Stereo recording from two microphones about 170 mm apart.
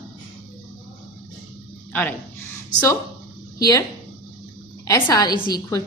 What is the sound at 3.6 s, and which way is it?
Speech, 20° left (ahead or behind).